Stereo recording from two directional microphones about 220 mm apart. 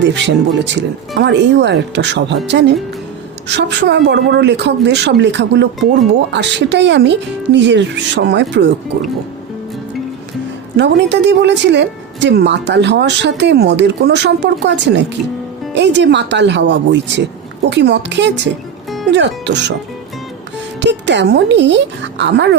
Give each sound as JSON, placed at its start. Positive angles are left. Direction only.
{"t": 0.0, "sound": "speech", "side_deg": -55}
{"t": 10.8, "sound": "speech", "side_deg": -50}
{"t": 20.8, "sound": "speech", "side_deg": -55}